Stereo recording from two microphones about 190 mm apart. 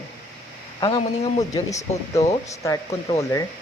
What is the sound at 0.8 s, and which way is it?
Speech, 25° left (ahead or behind).